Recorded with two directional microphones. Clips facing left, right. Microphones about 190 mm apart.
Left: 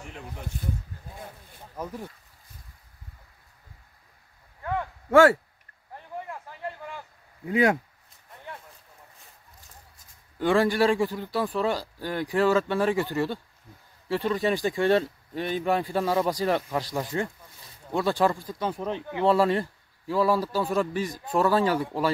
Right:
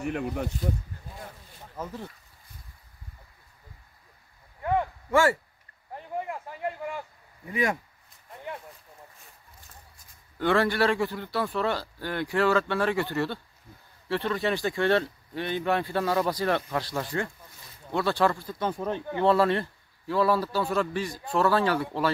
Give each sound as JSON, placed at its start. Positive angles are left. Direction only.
{"t": 0.0, "sound": "speech", "side_deg": -60}
{"t": 1.8, "sound": "a man's voice", "side_deg": 10}
{"t": 5.9, "sound": "a sound", "side_deg": -15}
{"t": 7.4, "sound": "speech", "side_deg": 90}
{"t": 10.4, "sound": "a man's voice", "side_deg": 15}
{"t": 18.8, "sound": "a man's voice", "side_deg": 0}